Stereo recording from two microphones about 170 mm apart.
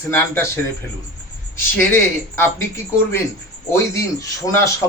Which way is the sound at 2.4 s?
15° left (ahead or behind).